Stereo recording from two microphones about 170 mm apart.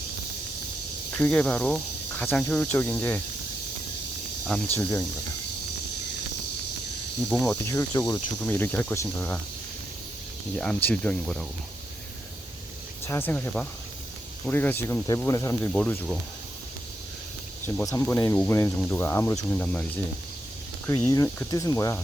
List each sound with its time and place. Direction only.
1.2 s speech: 10° left (ahead or behind)
4.4 s speech: 5° left (ahead or behind)
7.6 s speech: 15° left (ahead or behind)
10.5 s speech: 5° left (ahead or behind)
13.1 s speech: 10° left (ahead or behind)
17.7 s speech: 20° left (ahead or behind)
19.5 s speech: 10° left (ahead or behind)
20.8 s speech: 15° left (ahead or behind)